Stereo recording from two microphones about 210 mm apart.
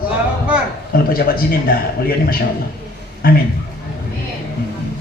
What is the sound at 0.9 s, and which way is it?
A man's voice, 45° left (ahead or behind).